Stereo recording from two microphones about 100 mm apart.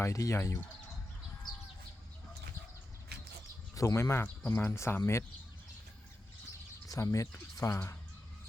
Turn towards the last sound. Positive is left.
turn(degrees=35)  # may be behind; listen again after turning